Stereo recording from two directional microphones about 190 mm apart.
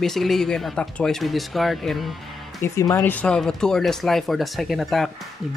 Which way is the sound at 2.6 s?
20° left (ahead or behind).